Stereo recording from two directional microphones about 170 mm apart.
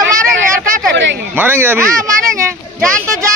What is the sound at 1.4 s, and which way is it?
Speech, 10° right (ahead or behind).